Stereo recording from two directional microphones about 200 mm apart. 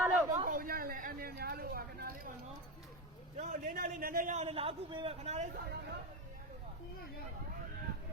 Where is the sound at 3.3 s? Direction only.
45° right (ahead or behind).